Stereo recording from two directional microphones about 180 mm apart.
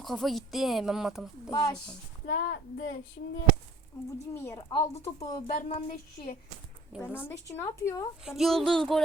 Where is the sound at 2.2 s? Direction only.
65° left (ahead or behind).